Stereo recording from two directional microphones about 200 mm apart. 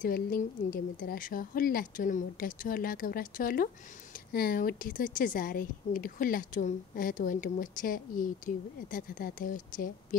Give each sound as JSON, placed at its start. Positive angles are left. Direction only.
{"t": 0.0, "sound": "a woman's voice", "side_deg": 45}